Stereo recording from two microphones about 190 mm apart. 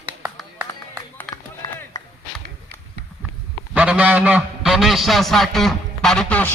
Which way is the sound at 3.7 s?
5° right (ahead or behind).